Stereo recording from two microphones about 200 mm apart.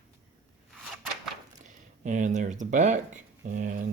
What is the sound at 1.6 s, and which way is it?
Speech, 40° right (ahead or behind).